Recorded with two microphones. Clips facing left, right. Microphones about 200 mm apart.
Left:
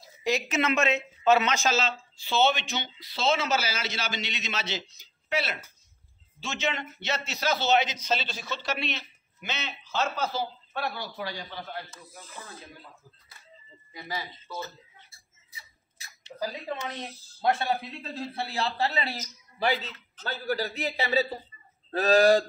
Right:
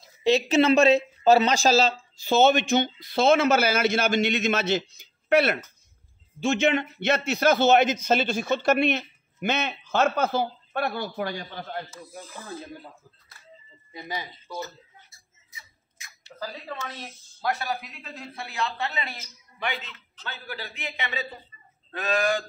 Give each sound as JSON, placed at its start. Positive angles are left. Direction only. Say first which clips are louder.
{"t": 0.2, "sound": "speech", "louder": "right 7 dB", "side_deg": -30}
{"t": 12.1, "sound": "speech", "louder": "right 5 dB", "side_deg": -10}
{"t": 13.9, "sound": "speech", "louder": "right 2 dB", "side_deg": -20}
{"t": 16.3, "sound": "speech", "louder": "left 3 dB", "side_deg": 20}